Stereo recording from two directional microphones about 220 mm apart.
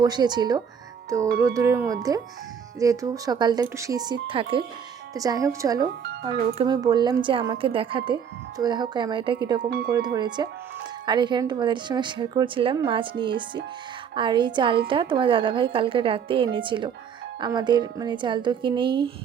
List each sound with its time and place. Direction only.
0.0 s a woman's voice: 20° right (ahead or behind)
9.6 s speech: 45° right (ahead or behind)
9.9 s a woman's voice: 15° right (ahead or behind)